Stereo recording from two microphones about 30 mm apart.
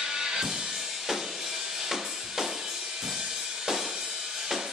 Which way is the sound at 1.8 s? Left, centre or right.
Centre.